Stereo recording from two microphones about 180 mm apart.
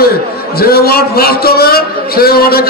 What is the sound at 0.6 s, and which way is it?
A man's voice, 60° left (ahead or behind).